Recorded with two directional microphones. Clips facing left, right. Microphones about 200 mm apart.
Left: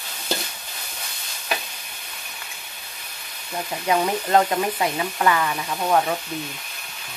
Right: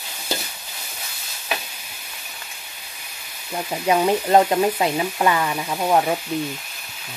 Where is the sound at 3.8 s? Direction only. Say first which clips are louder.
Right 4 dB; 25° right (ahead or behind).